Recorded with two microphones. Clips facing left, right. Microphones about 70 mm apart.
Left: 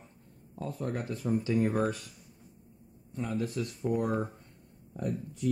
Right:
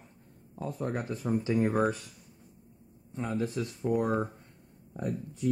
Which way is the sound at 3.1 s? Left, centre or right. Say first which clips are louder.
Right 1 dB; right.